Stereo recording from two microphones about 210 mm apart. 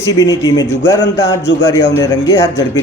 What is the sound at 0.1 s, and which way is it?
A man's voice, 15° left (ahead or behind).